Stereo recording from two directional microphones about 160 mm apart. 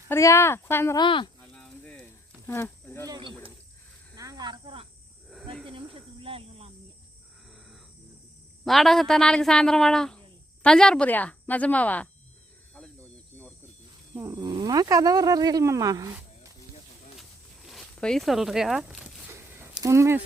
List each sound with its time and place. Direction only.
0.1 s speech: 20° left (ahead or behind)
0.9 s speech: 30° left (ahead or behind)
1.5 s a sound: 5° left (ahead or behind)
2.5 s speech: 10° left (ahead or behind)
3.1 s speech: 30° right (ahead or behind)
4.1 s cricket: 25° right (ahead or behind)
5.3 s cricket: centre (ahead or behind)
5.6 s cricket: 35° right (ahead or behind)
7.5 s wild animals: centre (ahead or behind)
8.6 s speech: centre (ahead or behind)
12.7 s cricket: 5° left (ahead or behind)
14.2 s speech: 20° right (ahead or behind)
17.7 s speech: centre (ahead or behind)
19.3 s a sound: 15° right (ahead or behind)